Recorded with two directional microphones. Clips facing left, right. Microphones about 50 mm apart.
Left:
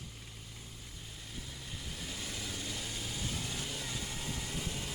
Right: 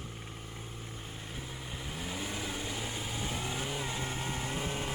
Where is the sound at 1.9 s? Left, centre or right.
Right.